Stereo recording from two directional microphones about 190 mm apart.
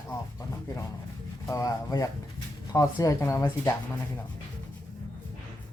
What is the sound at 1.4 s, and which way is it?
Speech, 15° left (ahead or behind).